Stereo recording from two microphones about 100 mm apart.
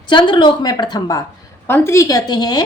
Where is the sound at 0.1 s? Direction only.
50° left (ahead or behind).